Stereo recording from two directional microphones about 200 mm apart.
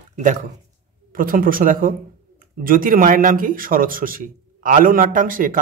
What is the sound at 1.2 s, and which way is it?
A man's voice, 45° right (ahead or behind).